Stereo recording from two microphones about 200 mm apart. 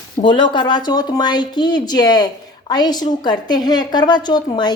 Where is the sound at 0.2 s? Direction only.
25° left (ahead or behind).